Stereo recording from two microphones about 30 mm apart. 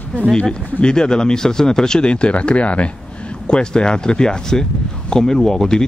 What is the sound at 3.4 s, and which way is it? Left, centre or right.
Speech, left.